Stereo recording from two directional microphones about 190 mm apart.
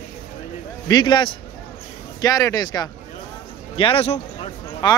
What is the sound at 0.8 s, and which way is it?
A man's voice, 20° left (ahead or behind).